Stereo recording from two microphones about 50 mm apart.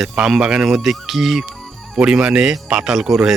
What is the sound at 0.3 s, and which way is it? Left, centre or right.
Speech, centre.